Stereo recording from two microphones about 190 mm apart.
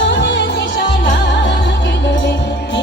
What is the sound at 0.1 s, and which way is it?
Music, 70° left (ahead or behind).